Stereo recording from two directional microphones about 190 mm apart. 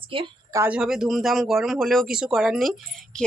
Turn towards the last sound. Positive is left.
turn(degrees=0)  # may be behind; listen again after turning